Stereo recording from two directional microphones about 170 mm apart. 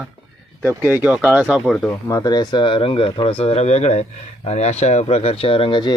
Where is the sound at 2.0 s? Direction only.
20° left (ahead or behind).